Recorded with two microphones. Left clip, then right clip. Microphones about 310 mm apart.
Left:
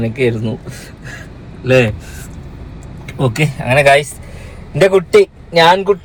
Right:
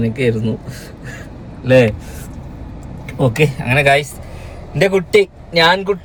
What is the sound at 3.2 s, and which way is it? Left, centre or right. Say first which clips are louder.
A man's voice: right 2 dB; centre.